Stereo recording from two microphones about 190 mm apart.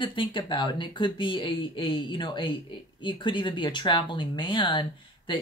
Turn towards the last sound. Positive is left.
turn(degrees=25)  # may be behind; listen again after turning